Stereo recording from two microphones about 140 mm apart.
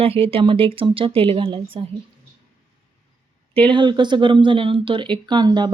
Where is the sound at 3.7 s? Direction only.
35° right (ahead or behind).